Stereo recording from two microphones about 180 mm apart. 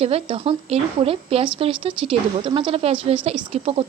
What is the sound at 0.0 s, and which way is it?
A woman's voice, 30° right (ahead or behind).